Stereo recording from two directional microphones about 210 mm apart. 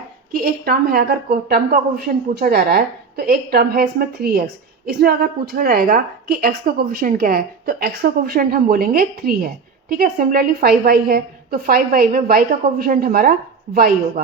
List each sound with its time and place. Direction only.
0.3 s a woman's voice: 45° right (ahead or behind)